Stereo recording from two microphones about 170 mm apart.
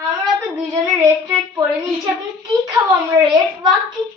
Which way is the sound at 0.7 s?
15° right (ahead or behind).